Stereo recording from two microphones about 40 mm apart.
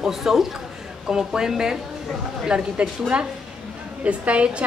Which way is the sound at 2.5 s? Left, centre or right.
Right.